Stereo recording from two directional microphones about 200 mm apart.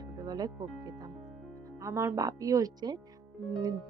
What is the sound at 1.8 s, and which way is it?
Speech, 15° right (ahead or behind).